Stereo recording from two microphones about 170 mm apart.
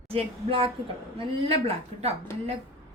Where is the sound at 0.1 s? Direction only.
35° right (ahead or behind).